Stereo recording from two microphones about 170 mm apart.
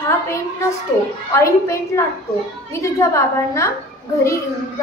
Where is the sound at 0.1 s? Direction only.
15° left (ahead or behind).